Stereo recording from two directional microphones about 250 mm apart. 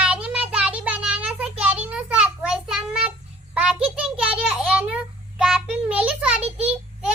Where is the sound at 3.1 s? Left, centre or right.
Centre.